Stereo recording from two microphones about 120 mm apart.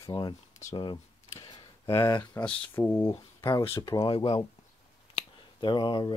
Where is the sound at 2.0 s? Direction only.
30° left (ahead or behind).